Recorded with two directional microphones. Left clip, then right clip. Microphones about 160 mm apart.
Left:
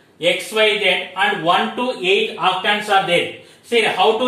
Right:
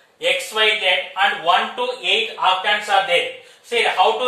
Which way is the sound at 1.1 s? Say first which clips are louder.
Even; 30° right (ahead or behind).